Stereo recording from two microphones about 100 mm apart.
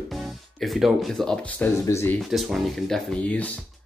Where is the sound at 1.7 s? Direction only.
30° left (ahead or behind).